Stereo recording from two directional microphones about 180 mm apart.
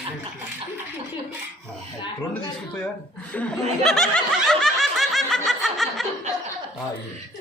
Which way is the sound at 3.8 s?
Centre (ahead or behind).